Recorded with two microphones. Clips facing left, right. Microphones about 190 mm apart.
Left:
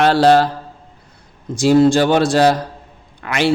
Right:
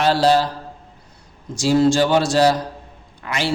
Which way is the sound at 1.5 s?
55° left (ahead or behind).